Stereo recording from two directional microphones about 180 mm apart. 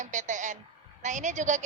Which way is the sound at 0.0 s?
45° right (ahead or behind).